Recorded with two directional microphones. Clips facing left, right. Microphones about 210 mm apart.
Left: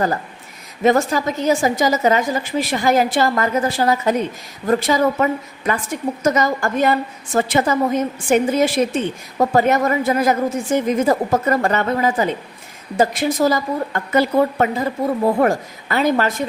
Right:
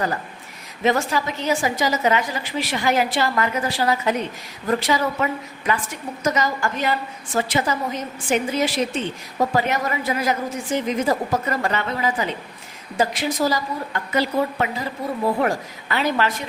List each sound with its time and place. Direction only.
0.8 s a woman's voice: 45° left (ahead or behind)